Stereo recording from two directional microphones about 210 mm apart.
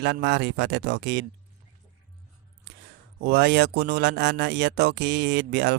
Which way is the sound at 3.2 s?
50° right (ahead or behind).